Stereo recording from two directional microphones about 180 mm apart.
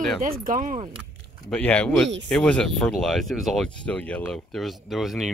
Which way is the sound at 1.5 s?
5° left (ahead or behind).